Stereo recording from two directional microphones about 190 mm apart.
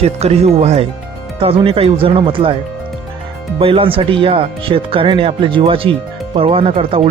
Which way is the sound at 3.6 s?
30° right (ahead or behind).